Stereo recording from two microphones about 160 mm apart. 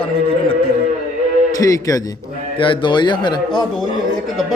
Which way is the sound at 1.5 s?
20° left (ahead or behind).